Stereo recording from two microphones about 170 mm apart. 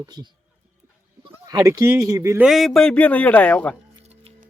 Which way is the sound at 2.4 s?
Centre (ahead or behind).